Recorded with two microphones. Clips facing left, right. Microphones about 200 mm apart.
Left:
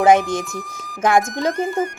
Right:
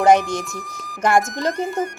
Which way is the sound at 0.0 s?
Centre (ahead or behind).